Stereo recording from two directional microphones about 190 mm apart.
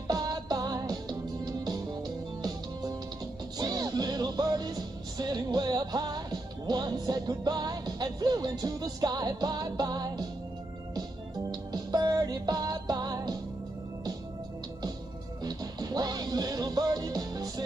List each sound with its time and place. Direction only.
0.1 s music: 20° right (ahead or behind)
3.5 s music: 20° right (ahead or behind)
11.7 s music: 20° right (ahead or behind)
15.4 s music: 20° right (ahead or behind)